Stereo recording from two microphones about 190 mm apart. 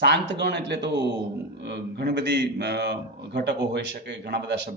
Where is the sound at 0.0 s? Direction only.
65° right (ahead or behind).